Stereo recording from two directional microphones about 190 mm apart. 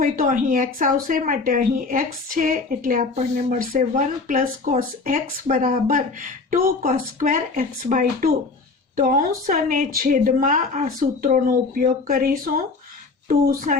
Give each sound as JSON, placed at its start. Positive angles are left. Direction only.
{"t": 0.0, "sound": "speech", "side_deg": -45}